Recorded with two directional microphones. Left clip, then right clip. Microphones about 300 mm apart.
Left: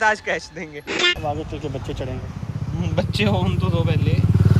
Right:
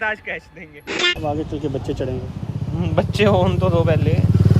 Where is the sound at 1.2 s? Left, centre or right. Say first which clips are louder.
Right 3 dB; right.